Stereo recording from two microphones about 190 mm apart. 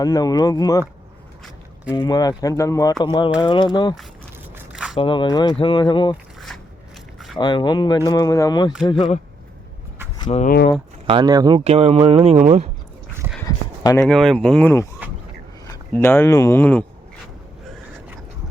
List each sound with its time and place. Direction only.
0.0 s speech: 20° left (ahead or behind)
1.9 s speech: 20° left (ahead or behind)
4.5 s a sound: 5° right (ahead or behind)
4.9 s speech: 25° left (ahead or behind)
6.5 s biting: 5° left (ahead or behind)
7.3 s speech: 25° left (ahead or behind)
10.2 s speech: 40° left (ahead or behind)
11.0 s speech: 25° right (ahead or behind)
11.6 s speech: 30° right (ahead or behind)
14.0 s speech: centre (ahead or behind)